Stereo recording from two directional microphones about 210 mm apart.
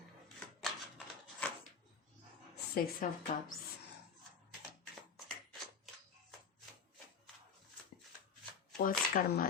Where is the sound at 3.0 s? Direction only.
40° left (ahead or behind).